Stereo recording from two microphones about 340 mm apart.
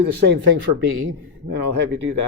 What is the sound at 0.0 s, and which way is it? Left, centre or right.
Speech, right.